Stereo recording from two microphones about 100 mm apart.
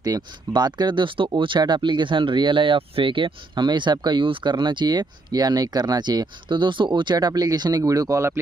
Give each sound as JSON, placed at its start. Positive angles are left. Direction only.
{"t": 0.1, "sound": "speech", "side_deg": -40}